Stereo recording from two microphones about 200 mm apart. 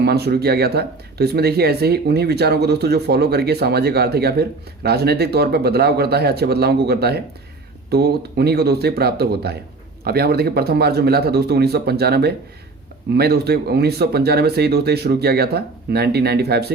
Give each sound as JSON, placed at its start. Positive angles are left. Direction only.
{"t": 0.0, "sound": "speech", "side_deg": -55}